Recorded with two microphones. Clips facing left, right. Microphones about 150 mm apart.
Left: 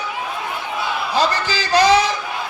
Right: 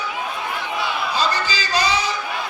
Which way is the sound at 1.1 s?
80° left.